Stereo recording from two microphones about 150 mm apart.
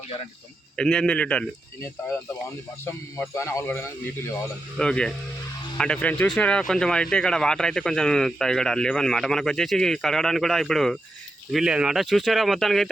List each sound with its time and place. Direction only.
0.8 s speech: 5° left (ahead or behind)
2.8 s speech: 15° left (ahead or behind)
4.8 s speech: 5° left (ahead or behind)